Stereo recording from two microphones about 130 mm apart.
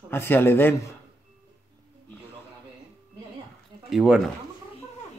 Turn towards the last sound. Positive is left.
turn(degrees=-5)  # may be behind; listen again after turning